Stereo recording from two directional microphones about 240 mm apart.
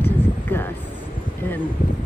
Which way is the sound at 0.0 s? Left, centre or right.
Centre.